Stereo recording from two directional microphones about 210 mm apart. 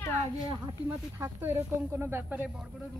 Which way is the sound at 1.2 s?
10° right (ahead or behind).